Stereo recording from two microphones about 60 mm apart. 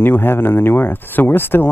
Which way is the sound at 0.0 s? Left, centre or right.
Left.